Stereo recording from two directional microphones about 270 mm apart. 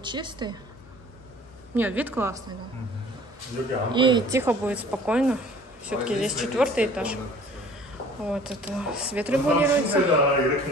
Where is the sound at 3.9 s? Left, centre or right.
Centre.